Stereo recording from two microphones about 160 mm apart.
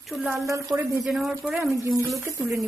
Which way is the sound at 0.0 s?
Centre (ahead or behind).